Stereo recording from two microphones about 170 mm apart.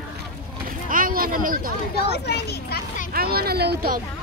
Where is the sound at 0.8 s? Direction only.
55° right (ahead or behind).